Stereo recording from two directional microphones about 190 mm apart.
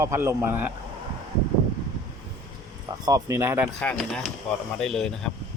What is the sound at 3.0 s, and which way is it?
Speech, 15° right (ahead or behind).